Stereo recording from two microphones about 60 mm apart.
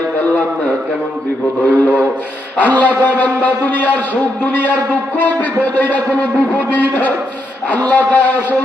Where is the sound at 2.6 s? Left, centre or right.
Left.